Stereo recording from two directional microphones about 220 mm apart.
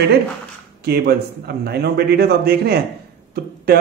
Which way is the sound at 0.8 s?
45° right (ahead or behind).